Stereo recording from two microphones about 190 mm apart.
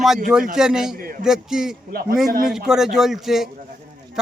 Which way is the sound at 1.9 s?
50° right (ahead or behind).